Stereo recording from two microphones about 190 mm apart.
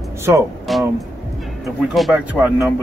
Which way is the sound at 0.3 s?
10° right (ahead or behind).